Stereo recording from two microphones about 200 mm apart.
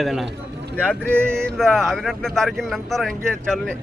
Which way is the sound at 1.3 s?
5° left (ahead or behind).